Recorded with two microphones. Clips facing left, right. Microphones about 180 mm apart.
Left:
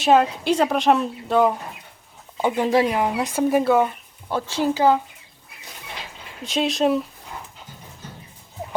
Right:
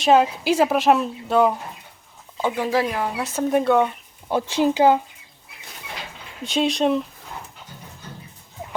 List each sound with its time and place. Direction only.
0.0 s a woman's voice: centre (ahead or behind)
2.4 s speech: 20° left (ahead or behind)
3.5 s a woman's voice: 5° left (ahead or behind)
4.3 s speech: 15° right (ahead or behind)
6.4 s a woman's voice: centre (ahead or behind)